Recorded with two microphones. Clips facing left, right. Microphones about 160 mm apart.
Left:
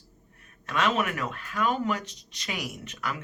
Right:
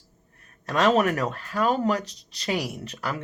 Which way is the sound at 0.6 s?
40° right (ahead or behind).